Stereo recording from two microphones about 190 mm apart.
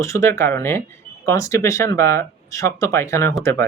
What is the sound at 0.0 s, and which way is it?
Speech, 15° left (ahead or behind).